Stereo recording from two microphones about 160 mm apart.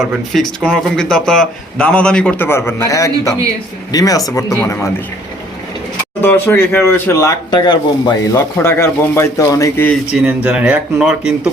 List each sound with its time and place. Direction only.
0.0 s speech: centre (ahead or behind); by 4.6 s 20° left (ahead or behind)
6.2 s speech: 15° left (ahead or behind)
10.2 s speech: 5° right (ahead or behind)